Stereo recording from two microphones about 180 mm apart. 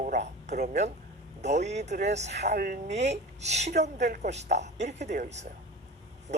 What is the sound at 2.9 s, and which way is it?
Speech, 40° right (ahead or behind).